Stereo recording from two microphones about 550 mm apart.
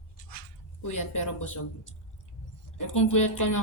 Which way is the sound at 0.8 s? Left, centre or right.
Left.